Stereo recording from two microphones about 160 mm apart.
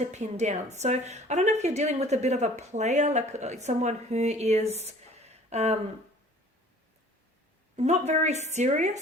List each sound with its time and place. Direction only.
0.1 s a woman's voice: 45° right (ahead or behind)
7.8 s a woman's voice: 45° right (ahead or behind)